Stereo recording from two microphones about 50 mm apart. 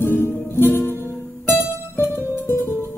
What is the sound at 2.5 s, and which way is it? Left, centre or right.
Music, left.